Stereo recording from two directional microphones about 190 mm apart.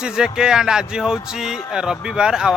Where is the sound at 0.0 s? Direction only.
5° right (ahead or behind).